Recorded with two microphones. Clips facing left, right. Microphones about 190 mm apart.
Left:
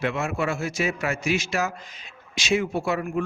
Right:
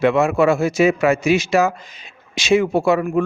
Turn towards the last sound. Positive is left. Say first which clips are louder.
# right 9 dB
turn(degrees=-85)